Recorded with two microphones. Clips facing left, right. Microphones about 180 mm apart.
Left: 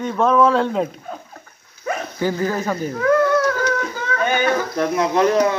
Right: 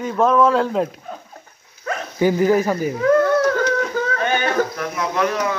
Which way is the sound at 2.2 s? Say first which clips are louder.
Right 7 dB; 15° right (ahead or behind).